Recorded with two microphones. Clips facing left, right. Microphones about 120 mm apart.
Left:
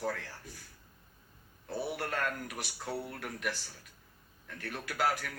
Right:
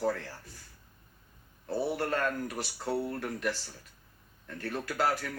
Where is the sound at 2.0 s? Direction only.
Centre (ahead or behind).